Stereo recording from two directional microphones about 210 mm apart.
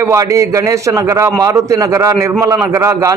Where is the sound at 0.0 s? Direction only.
15° right (ahead or behind).